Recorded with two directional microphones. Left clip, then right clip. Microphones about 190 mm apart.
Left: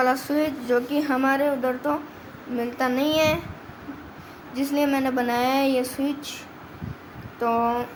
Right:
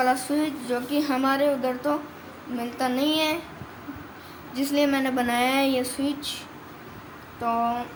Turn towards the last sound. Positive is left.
turn(degrees=35)  # may be behind; listen again after turning